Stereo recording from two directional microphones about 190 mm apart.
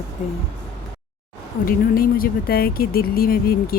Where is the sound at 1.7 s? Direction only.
50° left (ahead or behind).